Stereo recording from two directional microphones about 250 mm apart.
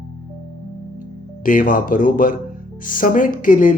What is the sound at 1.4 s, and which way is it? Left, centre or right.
Speech, left.